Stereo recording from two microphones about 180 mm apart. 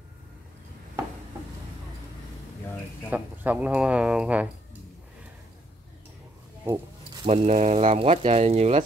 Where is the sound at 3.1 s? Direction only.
10° right (ahead or behind).